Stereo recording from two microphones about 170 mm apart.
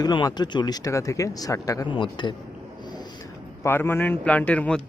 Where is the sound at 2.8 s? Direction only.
25° left (ahead or behind).